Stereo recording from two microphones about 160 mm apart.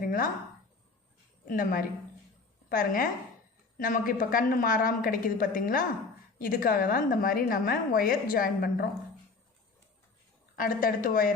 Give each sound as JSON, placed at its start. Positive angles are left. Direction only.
{"t": 0.0, "sound": "a sound", "side_deg": 60}
{"t": 1.5, "sound": "a woman's voice", "side_deg": 60}
{"t": 10.5, "sound": "a woman's voice", "side_deg": 60}